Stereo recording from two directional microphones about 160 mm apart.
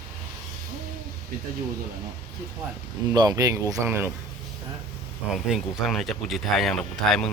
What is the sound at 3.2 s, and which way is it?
Speech, 20° right (ahead or behind).